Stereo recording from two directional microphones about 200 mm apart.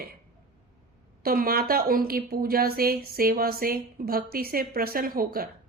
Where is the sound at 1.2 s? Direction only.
45° right (ahead or behind).